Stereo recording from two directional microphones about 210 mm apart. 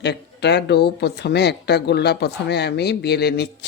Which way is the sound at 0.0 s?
55° left (ahead or behind).